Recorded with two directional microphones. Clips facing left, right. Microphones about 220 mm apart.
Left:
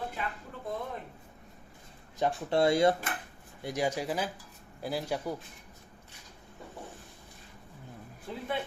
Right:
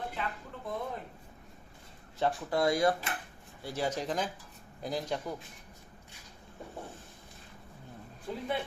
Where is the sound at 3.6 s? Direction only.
15° left (ahead or behind).